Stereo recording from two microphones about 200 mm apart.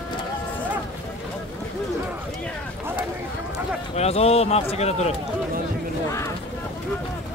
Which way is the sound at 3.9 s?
30° left (ahead or behind).